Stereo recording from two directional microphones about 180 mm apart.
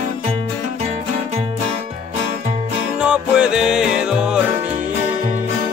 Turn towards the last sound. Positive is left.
turn(degrees=-5)  # may be behind; listen again after turning